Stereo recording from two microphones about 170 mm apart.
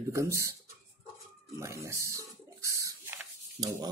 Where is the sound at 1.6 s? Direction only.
15° right (ahead or behind).